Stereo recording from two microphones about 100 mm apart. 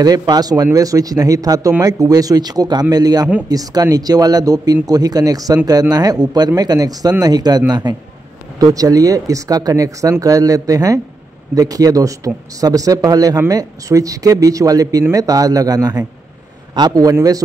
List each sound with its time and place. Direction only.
0.0 s speech: 40° right (ahead or behind)